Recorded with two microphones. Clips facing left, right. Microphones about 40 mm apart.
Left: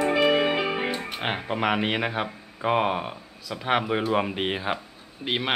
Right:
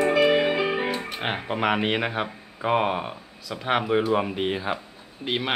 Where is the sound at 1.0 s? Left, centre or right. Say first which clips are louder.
Even; centre.